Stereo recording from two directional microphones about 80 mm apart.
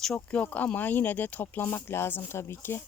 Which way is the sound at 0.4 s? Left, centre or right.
Centre.